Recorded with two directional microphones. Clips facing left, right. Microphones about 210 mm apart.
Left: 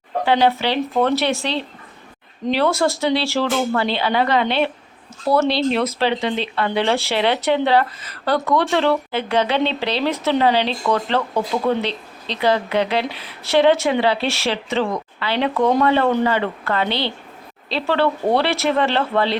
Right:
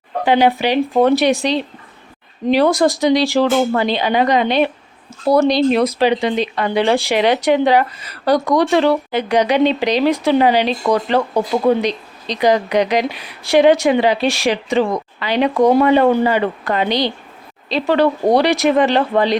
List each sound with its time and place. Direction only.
0.3 s speech: 15° right (ahead or behind)